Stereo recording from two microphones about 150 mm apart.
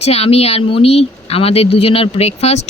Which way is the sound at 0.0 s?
45° left (ahead or behind).